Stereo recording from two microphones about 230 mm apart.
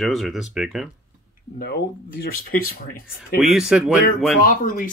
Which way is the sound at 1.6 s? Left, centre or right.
Left.